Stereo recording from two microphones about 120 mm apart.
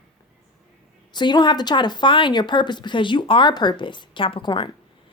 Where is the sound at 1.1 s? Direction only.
40° left (ahead or behind).